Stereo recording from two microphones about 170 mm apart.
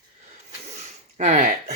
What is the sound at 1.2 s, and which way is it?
Speech, 45° right (ahead or behind).